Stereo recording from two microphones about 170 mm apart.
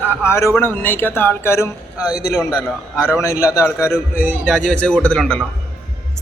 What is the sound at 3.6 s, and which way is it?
Speech, 5° right (ahead or behind).